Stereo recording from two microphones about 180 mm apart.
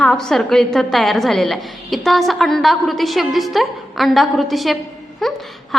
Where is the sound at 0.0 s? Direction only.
5° left (ahead or behind).